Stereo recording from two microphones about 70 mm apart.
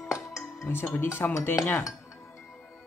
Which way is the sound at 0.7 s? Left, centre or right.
Left.